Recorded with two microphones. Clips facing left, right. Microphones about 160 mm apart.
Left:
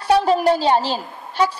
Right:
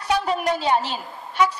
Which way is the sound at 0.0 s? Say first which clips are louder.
Left 7 dB; 30° left (ahead or behind).